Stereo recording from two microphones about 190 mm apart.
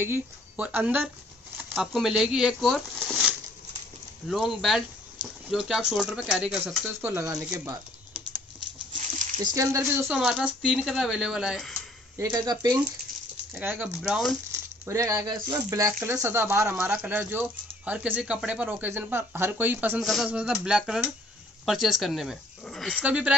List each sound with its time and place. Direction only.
0.0 s speech: 10° right (ahead or behind)
1.6 s a sound: 10° right (ahead or behind)
2.0 s speech: 5° right (ahead or behind)
9.4 s speech: 20° right (ahead or behind)
10.0 s speech: centre (ahead or behind)
12.2 s speech: 20° right (ahead or behind)
13.5 s speech: 10° right (ahead or behind)
14.5 s speech: 15° right (ahead or behind)